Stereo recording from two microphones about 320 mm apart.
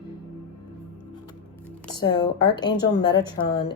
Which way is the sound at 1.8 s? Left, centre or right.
Centre.